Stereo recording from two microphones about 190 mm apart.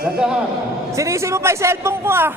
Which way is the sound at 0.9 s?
15° right (ahead or behind).